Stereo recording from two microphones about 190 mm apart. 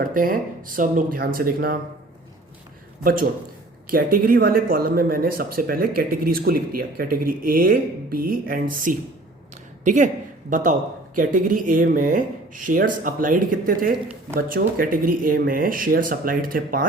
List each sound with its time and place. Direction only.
0.0 s speech: 45° right (ahead or behind)
3.0 s speech: 50° right (ahead or behind)